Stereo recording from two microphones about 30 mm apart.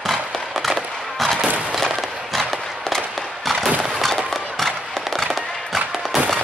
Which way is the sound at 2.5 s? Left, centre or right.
Centre.